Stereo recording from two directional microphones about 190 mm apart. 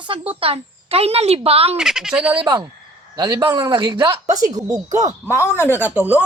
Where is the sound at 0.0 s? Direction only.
30° right (ahead or behind).